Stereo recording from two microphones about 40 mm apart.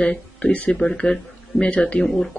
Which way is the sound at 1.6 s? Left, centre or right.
Left.